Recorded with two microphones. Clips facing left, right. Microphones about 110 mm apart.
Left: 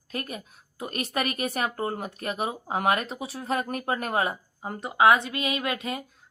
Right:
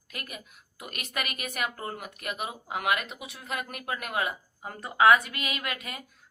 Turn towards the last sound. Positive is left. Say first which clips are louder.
# left 6 dB
turn(degrees=25)  # may be behind; listen again after turning